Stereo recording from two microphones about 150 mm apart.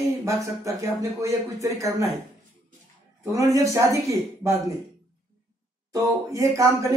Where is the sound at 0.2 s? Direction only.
20° right (ahead or behind).